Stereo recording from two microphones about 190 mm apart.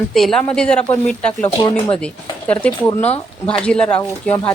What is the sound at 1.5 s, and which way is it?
Speech, 30° left (ahead or behind).